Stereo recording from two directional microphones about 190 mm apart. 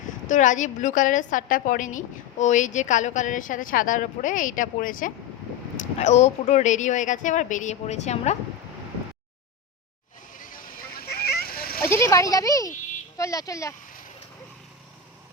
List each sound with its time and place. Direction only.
0.3 s a woman's voice: 40° left (ahead or behind)
11.0 s splash: 55° left (ahead or behind)
11.8 s speech: 15° left (ahead or behind)